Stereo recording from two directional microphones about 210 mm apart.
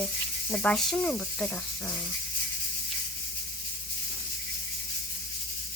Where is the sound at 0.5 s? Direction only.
5° left (ahead or behind).